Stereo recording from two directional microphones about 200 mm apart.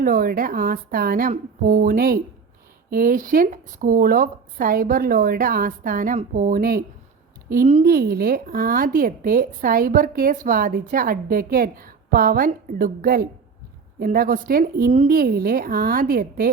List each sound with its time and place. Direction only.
0.0 s a woman's voice: 45° right (ahead or behind)